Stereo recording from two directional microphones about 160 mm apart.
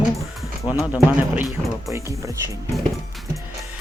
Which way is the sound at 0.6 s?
25° left (ahead or behind).